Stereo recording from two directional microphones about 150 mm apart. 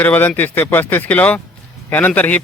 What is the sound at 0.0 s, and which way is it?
Speech, 10° left (ahead or behind).